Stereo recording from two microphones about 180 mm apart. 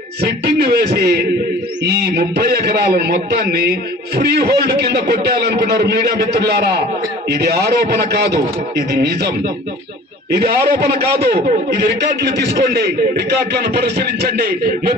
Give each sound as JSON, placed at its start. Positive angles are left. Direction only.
{"t": 0.2, "sound": "a man's voice", "side_deg": -60}
{"t": 10.3, "sound": "a man's voice", "side_deg": -60}